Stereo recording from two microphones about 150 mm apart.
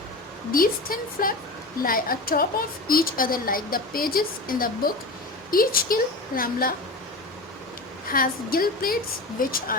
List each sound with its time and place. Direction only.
0.5 s a woman's voice: 70° left (ahead or behind)
8.1 s a woman's voice: 75° left (ahead or behind)